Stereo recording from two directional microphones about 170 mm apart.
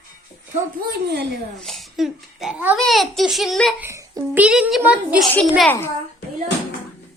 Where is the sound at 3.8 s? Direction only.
15° right (ahead or behind).